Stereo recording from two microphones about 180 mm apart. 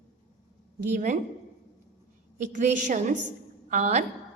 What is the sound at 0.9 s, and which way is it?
Speech, 45° right (ahead or behind).